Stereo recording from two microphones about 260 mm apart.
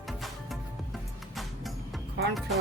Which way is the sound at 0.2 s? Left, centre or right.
Centre.